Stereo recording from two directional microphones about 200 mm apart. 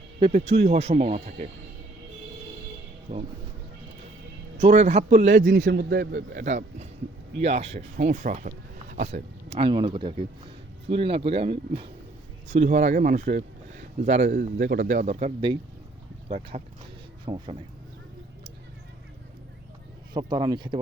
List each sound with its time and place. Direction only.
0.3 s speech: 35° right (ahead or behind)
3.1 s speech: 40° right (ahead or behind)
4.5 s speech: 35° right (ahead or behind)
5.6 s a man's voice: 55° right (ahead or behind); by 17.6 s 25° right (ahead or behind)
20.1 s speech: 20° right (ahead or behind)